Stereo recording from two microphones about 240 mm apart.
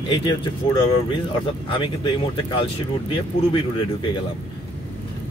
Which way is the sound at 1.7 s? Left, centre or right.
Left.